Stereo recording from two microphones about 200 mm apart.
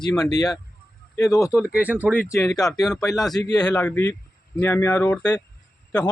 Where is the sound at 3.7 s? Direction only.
10° left (ahead or behind).